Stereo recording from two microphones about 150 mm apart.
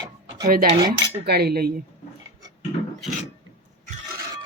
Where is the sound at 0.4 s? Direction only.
75° right (ahead or behind).